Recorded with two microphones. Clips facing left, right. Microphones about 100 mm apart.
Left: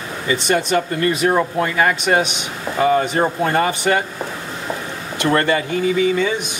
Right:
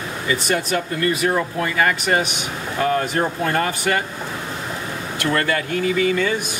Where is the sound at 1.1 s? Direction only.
20° left (ahead or behind).